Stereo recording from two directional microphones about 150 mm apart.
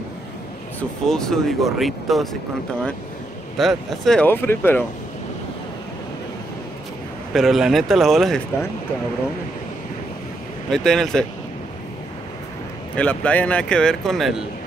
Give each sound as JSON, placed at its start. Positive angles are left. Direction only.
{"t": 0.7, "sound": "speech", "side_deg": 5}
{"t": 3.5, "sound": "speech", "side_deg": 0}
{"t": 7.3, "sound": "speech", "side_deg": 0}
{"t": 10.7, "sound": "speech", "side_deg": 0}
{"t": 12.9, "sound": "speech", "side_deg": 10}